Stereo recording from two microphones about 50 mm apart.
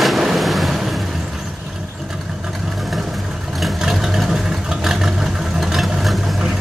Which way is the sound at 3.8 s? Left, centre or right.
Centre.